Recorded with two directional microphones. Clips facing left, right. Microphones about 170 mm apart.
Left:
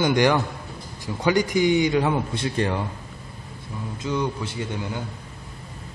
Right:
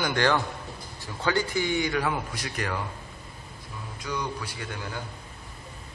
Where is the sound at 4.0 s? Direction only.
25° left (ahead or behind).